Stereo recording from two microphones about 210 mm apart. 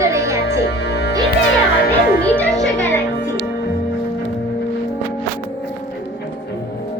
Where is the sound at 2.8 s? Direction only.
10° left (ahead or behind).